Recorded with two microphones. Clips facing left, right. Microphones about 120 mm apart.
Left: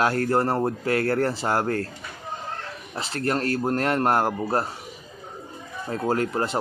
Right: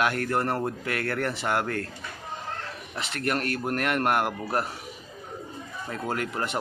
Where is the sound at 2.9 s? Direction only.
30° left (ahead or behind).